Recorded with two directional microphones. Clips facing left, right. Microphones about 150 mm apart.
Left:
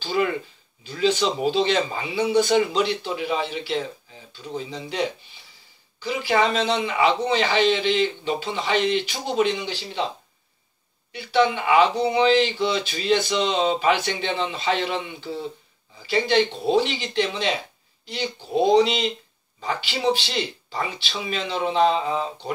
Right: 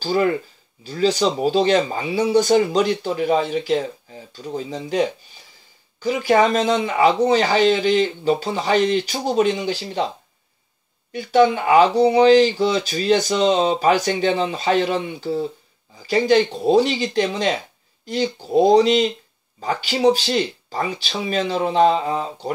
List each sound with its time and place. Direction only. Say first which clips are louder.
0.0 s speech: right 4 dB; 40° right (ahead or behind)
11.1 s speech: right 5 dB; 45° right (ahead or behind)